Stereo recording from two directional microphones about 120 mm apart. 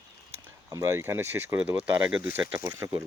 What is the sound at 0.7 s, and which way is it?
Speech, 25° right (ahead or behind).